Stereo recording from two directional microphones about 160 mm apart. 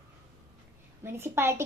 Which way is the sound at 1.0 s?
15° right (ahead or behind).